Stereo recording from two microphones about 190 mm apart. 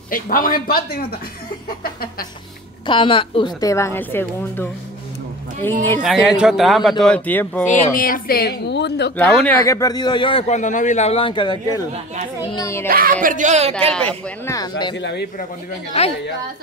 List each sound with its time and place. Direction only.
0.1 s speech: 45° left (ahead or behind)
2.9 s a woman's voice: 25° left (ahead or behind)
6.0 s speech: centre (ahead or behind)
7.6 s a woman's voice: 45° left (ahead or behind); by 9.1 s 65° left (ahead or behind)
9.1 s a woman's voice: 10° left (ahead or behind); by 10.4 s 25° left (ahead or behind)
10.5 s a woman's voice: 40° left (ahead or behind); by 12.8 s 15° left (ahead or behind)
12.8 s speech: 50° right (ahead or behind)
14.4 s speech: 20° left (ahead or behind)
15.0 s a woman's voice: 65° left (ahead or behind)
16.0 s speech: 35° left (ahead or behind)